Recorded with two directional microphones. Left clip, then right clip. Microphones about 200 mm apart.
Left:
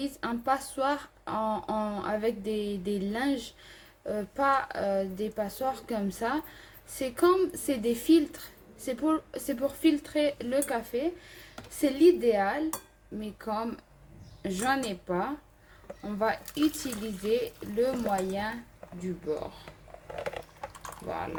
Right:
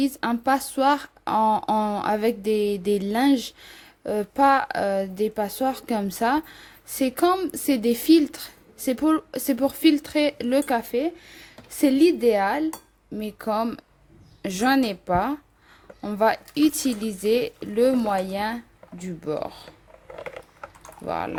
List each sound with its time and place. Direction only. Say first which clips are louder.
0.0 s speech: right 8 dB; 55° right (ahead or behind)